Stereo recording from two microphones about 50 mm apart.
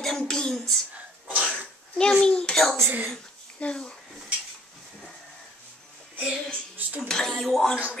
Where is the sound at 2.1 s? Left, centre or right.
Centre.